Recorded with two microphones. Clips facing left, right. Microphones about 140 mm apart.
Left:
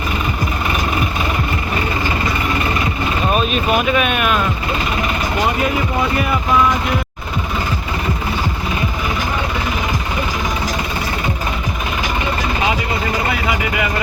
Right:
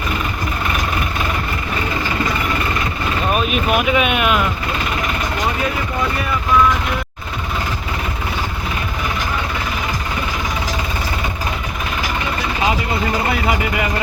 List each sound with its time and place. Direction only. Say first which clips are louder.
3.3 s speech: left 1 dB; 10° right (ahead or behind)